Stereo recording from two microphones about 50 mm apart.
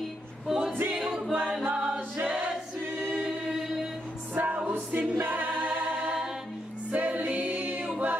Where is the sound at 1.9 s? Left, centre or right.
Right.